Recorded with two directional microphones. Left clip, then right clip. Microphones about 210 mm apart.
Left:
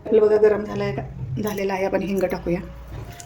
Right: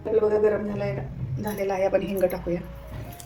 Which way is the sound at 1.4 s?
35° left (ahead or behind).